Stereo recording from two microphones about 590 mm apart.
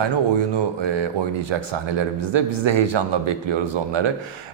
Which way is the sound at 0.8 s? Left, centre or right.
Right.